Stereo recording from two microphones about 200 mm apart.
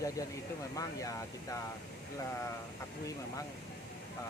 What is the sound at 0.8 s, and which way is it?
Speech, 15° left (ahead or behind).